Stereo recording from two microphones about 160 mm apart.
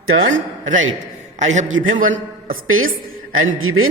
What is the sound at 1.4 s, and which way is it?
A man's voice, 50° right (ahead or behind).